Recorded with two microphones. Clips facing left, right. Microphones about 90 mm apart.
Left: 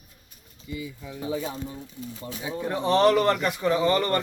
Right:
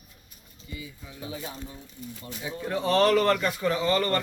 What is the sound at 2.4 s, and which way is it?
Speech, 20° left (ahead or behind).